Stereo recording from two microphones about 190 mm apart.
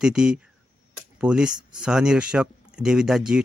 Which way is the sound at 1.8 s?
5° right (ahead or behind).